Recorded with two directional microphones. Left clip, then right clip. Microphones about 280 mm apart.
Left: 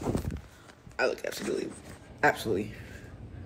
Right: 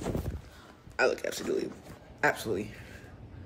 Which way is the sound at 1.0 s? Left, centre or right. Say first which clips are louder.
Right 2 dB; centre.